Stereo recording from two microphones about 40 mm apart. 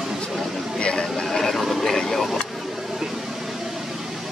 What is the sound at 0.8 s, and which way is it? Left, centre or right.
Speech, left.